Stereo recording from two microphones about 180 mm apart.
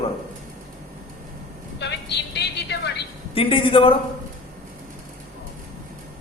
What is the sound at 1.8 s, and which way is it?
Music, 70° left (ahead or behind).